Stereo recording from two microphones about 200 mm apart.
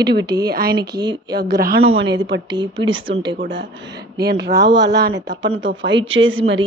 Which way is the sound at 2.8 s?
75° right (ahead or behind).